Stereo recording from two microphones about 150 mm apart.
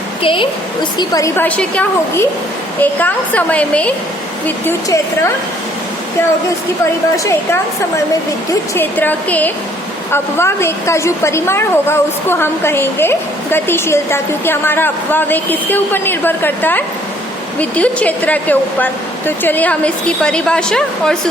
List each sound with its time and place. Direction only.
0.2 s a woman's voice: 35° left (ahead or behind)
0.9 s a woman's voice: 25° left (ahead or behind)
1.4 s a woman's voice: 10° left (ahead or behind)
8.7 s a woman's voice: 15° left (ahead or behind)